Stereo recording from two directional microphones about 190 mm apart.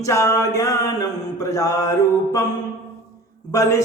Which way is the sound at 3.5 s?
15° left (ahead or behind).